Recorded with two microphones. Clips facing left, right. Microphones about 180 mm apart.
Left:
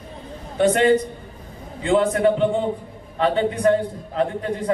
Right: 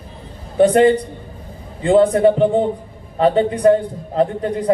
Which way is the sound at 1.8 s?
35° right (ahead or behind).